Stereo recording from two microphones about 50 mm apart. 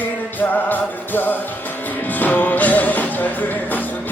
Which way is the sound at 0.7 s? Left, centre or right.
Left.